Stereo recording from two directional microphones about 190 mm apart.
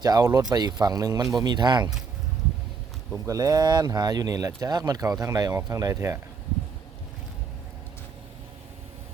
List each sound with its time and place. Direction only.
0.0 s speech: 20° right (ahead or behind)
3.2 s speech: 15° right (ahead or behind)